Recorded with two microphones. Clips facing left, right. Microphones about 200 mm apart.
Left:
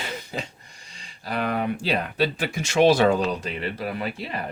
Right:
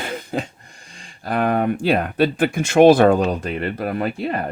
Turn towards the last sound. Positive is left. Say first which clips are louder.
# right 7 dB
turn(degrees=-55)  # may be behind; listen again after turning